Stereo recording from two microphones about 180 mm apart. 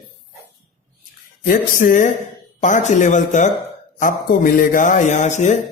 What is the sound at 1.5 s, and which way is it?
A man's voice, 50° left (ahead or behind).